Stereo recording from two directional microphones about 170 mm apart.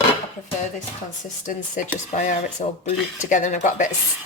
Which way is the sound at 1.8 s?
50° left (ahead or behind).